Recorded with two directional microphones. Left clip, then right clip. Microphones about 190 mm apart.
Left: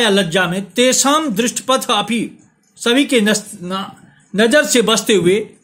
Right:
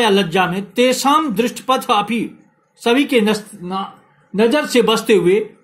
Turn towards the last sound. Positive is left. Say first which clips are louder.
# even
turn(degrees=30)  # may be behind; listen again after turning